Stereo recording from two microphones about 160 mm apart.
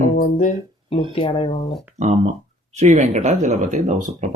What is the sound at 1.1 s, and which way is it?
Speech, 35° left (ahead or behind).